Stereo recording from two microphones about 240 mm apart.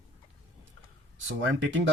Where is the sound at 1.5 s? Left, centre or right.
Right.